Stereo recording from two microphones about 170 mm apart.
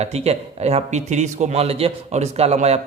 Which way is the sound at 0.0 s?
40° right (ahead or behind).